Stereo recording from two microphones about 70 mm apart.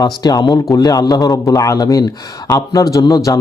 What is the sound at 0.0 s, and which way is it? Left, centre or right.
A man's voice, left.